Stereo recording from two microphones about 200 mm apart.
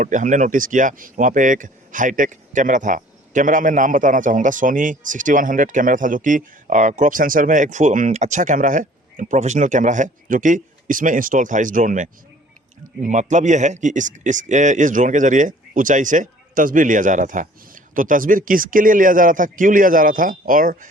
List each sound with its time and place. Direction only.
0.0 s speech: 40° right (ahead or behind)